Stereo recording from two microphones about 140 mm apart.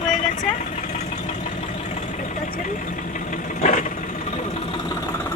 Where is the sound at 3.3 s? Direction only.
70° left (ahead or behind).